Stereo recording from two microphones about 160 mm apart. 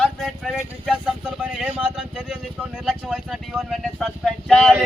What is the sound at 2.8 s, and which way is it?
Speech, centre (ahead or behind).